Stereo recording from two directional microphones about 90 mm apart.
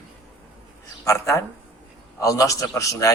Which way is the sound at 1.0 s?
35° left (ahead or behind).